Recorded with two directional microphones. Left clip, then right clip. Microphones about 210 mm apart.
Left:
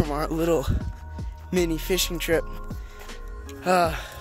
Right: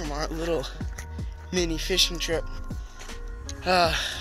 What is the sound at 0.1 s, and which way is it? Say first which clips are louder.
Speech: left 2 dB; 45° left (ahead or behind).